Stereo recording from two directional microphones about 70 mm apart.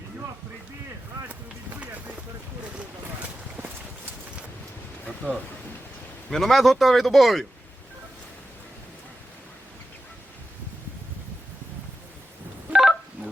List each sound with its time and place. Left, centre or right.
1.8 s a sound: right
5.2 s speech: centre
6.3 s speech: centre
12.7 s telephone dialing: centre